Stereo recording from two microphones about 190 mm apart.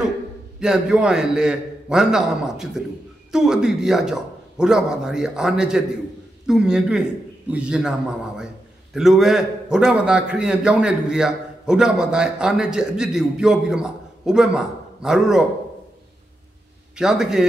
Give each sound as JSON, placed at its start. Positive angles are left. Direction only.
{"t": 0.6, "sound": "a man's voice", "side_deg": -5}
{"t": 8.9, "sound": "a man's voice", "side_deg": 0}
{"t": 16.9, "sound": "a man's voice", "side_deg": -5}